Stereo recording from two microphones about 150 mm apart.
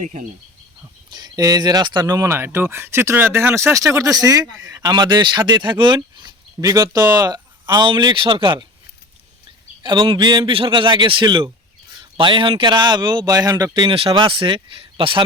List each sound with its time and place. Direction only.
1.1 s speech: 25° right (ahead or behind)
9.8 s a man's voice: 30° right (ahead or behind)